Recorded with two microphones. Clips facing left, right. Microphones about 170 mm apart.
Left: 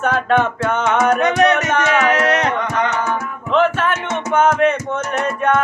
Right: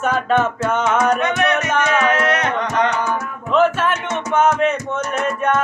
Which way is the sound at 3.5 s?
5° right (ahead or behind).